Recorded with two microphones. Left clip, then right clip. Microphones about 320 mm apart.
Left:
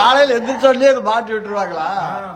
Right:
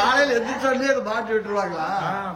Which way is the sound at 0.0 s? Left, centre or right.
Centre.